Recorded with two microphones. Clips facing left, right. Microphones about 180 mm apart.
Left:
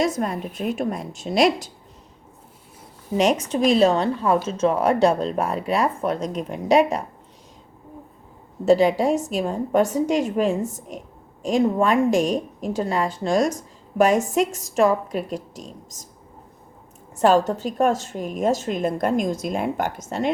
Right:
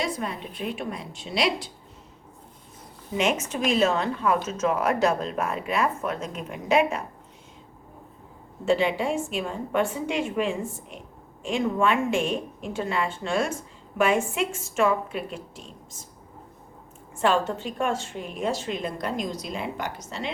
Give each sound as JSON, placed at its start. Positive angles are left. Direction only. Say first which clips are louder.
{"t": 0.0, "sound": "a woman's voice", "louder": "left 7 dB", "side_deg": 45}
{"t": 3.2, "sound": "a woman's voice", "louder": "left 6 dB", "side_deg": 35}
{"t": 8.6, "sound": "a woman's voice", "louder": "left 6 dB", "side_deg": 40}
{"t": 17.2, "sound": "a woman's voice", "louder": "left 6 dB", "side_deg": 40}